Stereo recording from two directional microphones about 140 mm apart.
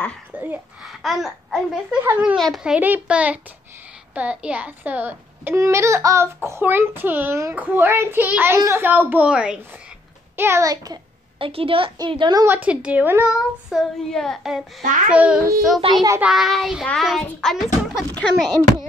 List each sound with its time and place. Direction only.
0.3 s a child's voice: 15° right (ahead or behind)
0.8 s child singing: centre (ahead or behind)
2.3 s a child's voice: centre (ahead or behind); by 11.0 s 25° right (ahead or behind)
11.3 s a woman's voice: 40° right (ahead or behind)
12.4 s a child's voice: 10° right (ahead or behind)
15.8 s a woman's voice: 30° right (ahead or behind)
16.2 s child singing: 5° right (ahead or behind)